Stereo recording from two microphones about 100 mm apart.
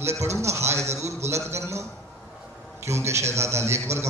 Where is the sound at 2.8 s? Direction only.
30° right (ahead or behind).